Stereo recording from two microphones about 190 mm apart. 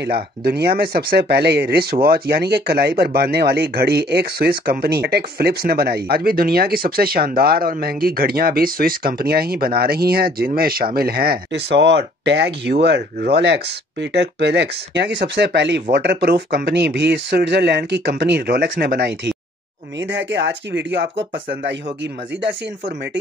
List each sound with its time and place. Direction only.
0.0 s speech: 55° right (ahead or behind)
20.0 s speech: 75° right (ahead or behind)